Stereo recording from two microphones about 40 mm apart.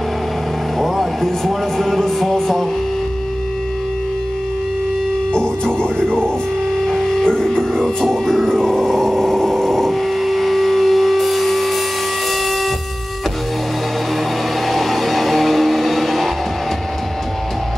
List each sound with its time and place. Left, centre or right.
0.7 s speech: centre
5.3 s speech: left
6.9 s music: centre
7.8 s a sound: centre
14.7 s vehicle: centre